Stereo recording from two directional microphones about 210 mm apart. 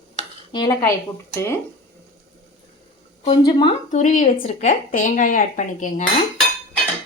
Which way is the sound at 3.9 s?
35° left (ahead or behind).